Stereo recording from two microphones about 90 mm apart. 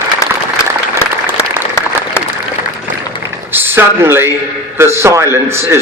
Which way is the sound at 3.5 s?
25° right (ahead or behind).